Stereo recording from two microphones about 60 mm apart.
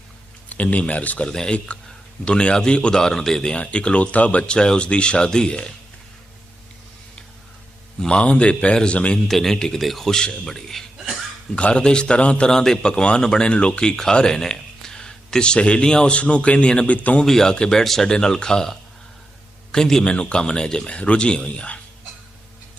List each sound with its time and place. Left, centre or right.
0.5 s a man's voice: left
1.3 s a man's voice: centre
7.9 s a man's voice: centre
9.2 s a man's voice: centre
11.5 s a man's voice: centre
17.2 s a man's voice: centre